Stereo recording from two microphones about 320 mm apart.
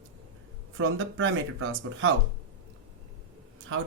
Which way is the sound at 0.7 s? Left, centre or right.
Right.